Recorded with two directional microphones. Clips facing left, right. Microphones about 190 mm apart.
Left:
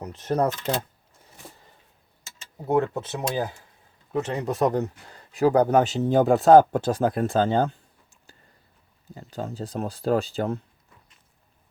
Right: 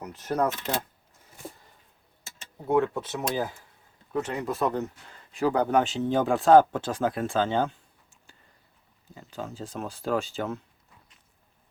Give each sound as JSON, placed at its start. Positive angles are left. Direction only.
{"t": 0.2, "sound": "speech", "side_deg": 30}
{"t": 2.9, "sound": "speech", "side_deg": 20}
{"t": 4.1, "sound": "speech", "side_deg": 30}
{"t": 9.1, "sound": "speech", "side_deg": 40}